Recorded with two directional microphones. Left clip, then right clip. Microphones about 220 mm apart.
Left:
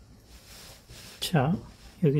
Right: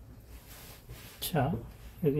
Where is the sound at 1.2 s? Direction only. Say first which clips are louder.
Left 4 dB; 45° left (ahead or behind).